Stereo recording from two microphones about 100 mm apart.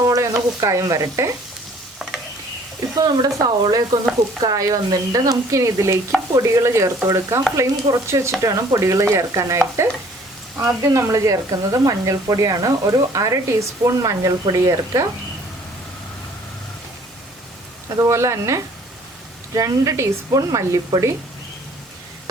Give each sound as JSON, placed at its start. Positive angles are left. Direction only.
{"t": 0.0, "sound": "stir", "side_deg": -35}
{"t": 0.6, "sound": "speech", "side_deg": -35}
{"t": 2.9, "sound": "speech", "side_deg": -40}
{"t": 18.0, "sound": "speech", "side_deg": -30}